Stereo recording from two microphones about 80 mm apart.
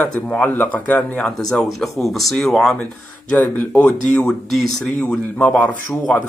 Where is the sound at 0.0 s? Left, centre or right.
Left; by 2.8 s centre.